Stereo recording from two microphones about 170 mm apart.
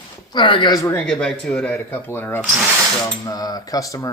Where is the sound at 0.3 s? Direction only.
30° left (ahead or behind).